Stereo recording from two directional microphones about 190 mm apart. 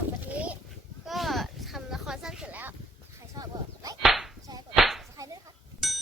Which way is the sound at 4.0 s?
Centre (ahead or behind).